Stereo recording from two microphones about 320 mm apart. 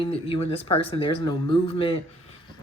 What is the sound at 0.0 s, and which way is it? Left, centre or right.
Speech, centre.